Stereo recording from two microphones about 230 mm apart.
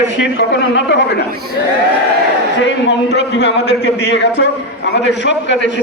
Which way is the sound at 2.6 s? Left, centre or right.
Left.